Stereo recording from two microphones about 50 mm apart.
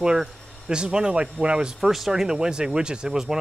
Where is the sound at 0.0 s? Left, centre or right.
Centre.